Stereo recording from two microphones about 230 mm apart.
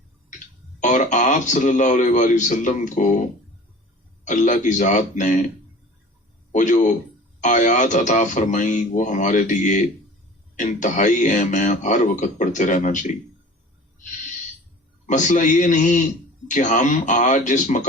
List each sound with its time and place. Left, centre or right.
0.3 s speech: left
4.3 s speech: left
6.5 s a man's voice: left
15.0 s speech: left